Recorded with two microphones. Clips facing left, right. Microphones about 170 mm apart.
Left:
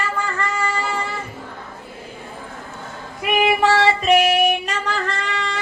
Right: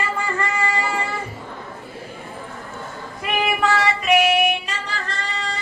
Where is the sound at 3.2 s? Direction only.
15° left (ahead or behind).